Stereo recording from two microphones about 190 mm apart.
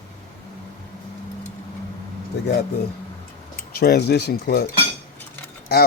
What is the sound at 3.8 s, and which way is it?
Speech, 55° left (ahead or behind).